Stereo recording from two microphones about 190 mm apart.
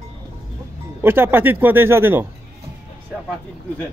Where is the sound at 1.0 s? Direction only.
10° right (ahead or behind).